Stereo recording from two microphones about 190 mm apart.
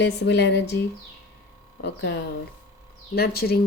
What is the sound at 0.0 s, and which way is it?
Speech, 60° left (ahead or behind).